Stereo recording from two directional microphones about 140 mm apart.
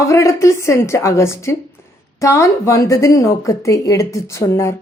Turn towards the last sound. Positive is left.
turn(degrees=20)  # may be behind; listen again after turning